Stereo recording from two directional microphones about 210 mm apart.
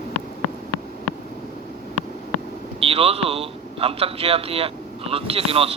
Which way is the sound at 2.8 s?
25° right (ahead or behind).